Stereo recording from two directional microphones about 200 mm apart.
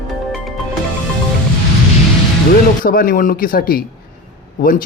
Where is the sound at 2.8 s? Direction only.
45° left (ahead or behind).